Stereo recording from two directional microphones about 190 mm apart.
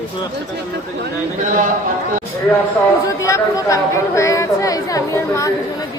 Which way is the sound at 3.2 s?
15° left (ahead or behind).